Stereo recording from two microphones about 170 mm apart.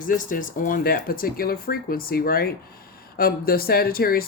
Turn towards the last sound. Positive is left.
turn(degrees=60)  # may be behind; listen again after turning